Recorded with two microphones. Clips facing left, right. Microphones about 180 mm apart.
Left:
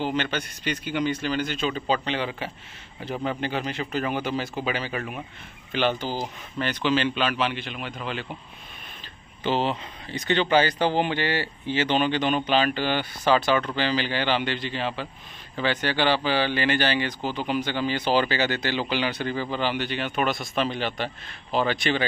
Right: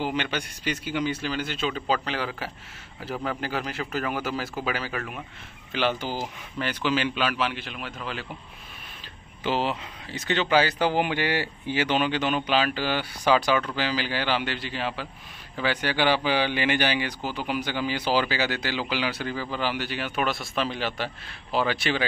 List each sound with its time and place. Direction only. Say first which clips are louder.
0.0 s speech: left 1 dB; 10° right (ahead or behind)
2.1 s speech: left 2 dB; 15° left (ahead or behind)
3.1 s speech: left 2 dB; 5° right (ahead or behind)
9.4 s speech: left 2 dB; 5° right (ahead or behind)